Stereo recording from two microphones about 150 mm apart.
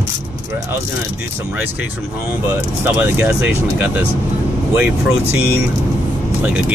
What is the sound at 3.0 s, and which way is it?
Speech, 10° right (ahead or behind).